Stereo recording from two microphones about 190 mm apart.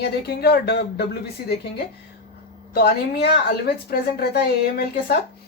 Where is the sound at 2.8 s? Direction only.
55° left (ahead or behind).